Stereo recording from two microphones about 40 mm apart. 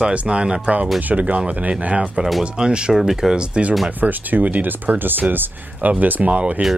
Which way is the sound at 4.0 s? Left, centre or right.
Right.